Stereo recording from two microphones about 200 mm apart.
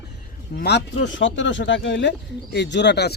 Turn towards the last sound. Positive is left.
turn(degrees=60)  # may be behind; listen again after turning